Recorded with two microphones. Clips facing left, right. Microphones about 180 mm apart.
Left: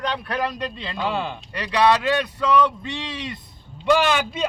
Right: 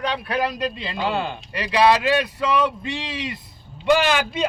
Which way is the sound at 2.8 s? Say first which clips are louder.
Right 2 dB; 90° right.